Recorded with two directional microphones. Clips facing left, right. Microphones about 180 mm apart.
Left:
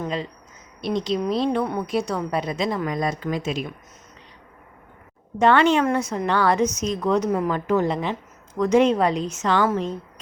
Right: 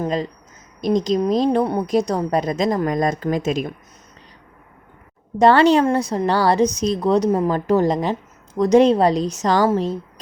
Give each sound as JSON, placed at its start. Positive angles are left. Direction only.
{"t": 0.0, "sound": "a woman's voice", "side_deg": -40}
{"t": 5.4, "sound": "a woman's voice", "side_deg": -35}